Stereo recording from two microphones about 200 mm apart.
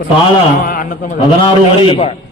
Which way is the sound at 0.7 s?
40° left (ahead or behind).